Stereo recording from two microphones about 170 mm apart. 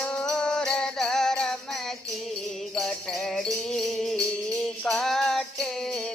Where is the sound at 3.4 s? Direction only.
Centre (ahead or behind).